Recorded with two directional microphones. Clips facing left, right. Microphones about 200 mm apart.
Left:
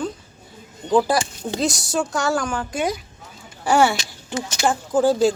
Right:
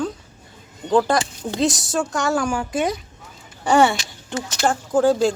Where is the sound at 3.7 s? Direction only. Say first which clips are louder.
Right 1 dB; centre (ahead or behind).